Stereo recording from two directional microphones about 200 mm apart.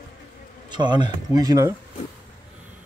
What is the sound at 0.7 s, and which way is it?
Speech, 20° right (ahead or behind).